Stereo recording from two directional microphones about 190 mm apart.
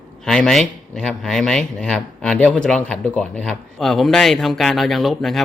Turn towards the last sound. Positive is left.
turn(degrees=0)  # may be behind; listen again after turning